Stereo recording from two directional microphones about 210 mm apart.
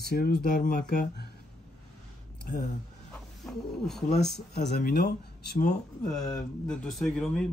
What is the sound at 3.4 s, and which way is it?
Speech, centre (ahead or behind).